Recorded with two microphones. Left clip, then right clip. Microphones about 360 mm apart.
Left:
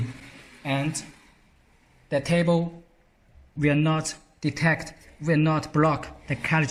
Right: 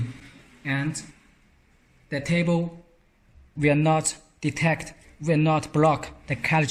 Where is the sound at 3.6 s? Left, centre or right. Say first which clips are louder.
Right 3 dB; centre.